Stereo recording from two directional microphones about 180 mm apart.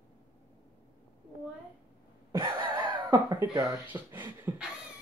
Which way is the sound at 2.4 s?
25° right (ahead or behind).